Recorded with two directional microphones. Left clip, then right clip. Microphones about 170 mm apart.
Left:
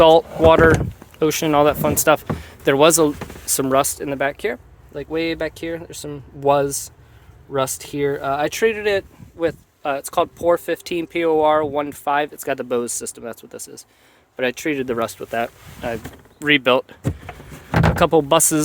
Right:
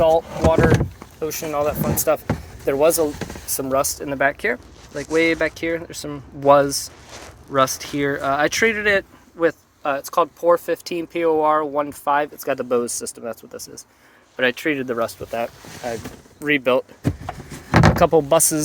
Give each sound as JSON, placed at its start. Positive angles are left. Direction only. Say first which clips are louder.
{"t": 0.0, "sound": "speech", "louder": "left 5 dB", "side_deg": 60}
{"t": 4.0, "sound": "speech", "louder": "right 2 dB", "side_deg": 25}
{"t": 14.3, "sound": "speech", "louder": "right 1 dB", "side_deg": 30}
{"t": 17.9, "sound": "speech", "louder": "left 3 dB", "side_deg": 25}